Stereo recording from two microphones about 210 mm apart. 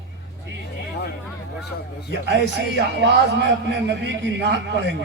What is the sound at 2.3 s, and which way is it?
A man's voice, 55° right (ahead or behind).